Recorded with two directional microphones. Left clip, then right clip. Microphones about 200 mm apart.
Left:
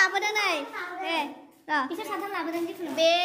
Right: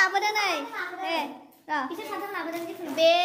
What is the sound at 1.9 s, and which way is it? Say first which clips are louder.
Speech: left 1 dB; 40° left (ahead or behind).